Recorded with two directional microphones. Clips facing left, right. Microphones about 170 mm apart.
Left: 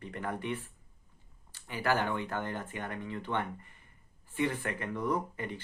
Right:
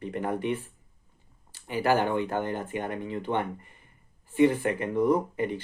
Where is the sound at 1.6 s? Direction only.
20° right (ahead or behind).